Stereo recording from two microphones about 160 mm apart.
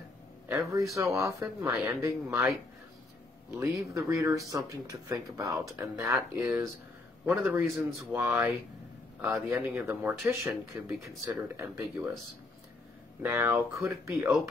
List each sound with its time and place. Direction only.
0.5 s a man's voice: 20° right (ahead or behind)
3.5 s speech: 20° right (ahead or behind)
10.4 s speech: centre (ahead or behind)
11.0 s speech: 15° right (ahead or behind)
13.2 s speech: 15° right (ahead or behind)